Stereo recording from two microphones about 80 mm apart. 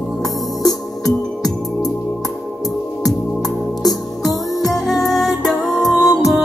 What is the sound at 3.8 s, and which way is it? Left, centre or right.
Music, centre.